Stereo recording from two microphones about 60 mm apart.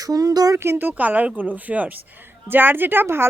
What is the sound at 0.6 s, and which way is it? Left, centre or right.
Speech, right.